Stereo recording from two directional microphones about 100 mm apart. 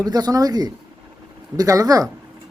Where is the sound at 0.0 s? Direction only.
40° right (ahead or behind).